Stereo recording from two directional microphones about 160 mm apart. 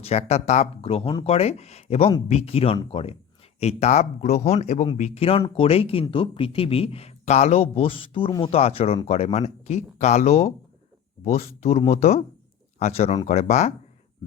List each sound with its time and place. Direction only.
0.0 s speech: 40° left (ahead or behind)